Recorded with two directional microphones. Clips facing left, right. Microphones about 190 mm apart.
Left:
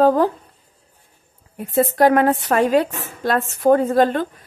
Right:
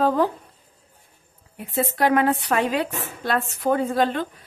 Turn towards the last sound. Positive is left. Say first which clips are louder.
# left 5 dB
turn(degrees=45)  # may be behind; listen again after turning